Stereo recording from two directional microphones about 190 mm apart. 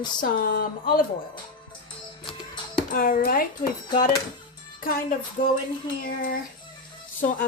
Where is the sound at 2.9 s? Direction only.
45° left (ahead or behind).